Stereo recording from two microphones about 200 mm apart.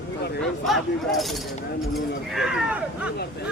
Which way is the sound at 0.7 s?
Centre (ahead or behind).